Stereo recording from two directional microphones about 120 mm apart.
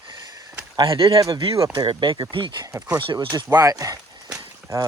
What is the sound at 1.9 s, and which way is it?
Speech, 40° right (ahead or behind).